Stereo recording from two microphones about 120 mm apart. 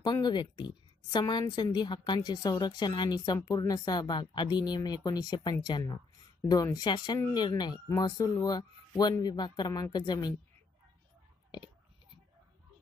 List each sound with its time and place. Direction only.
0.0 s a woman's voice: 35° left (ahead or behind)